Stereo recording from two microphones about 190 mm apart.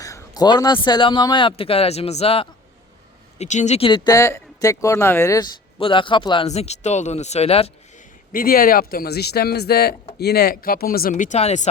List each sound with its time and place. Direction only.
0.0 s a man's voice: 15° left (ahead or behind)
5.8 s speech: 25° left (ahead or behind)
8.3 s speech: 50° left (ahead or behind)